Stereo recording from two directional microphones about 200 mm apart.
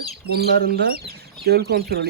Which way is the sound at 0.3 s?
50° right (ahead or behind).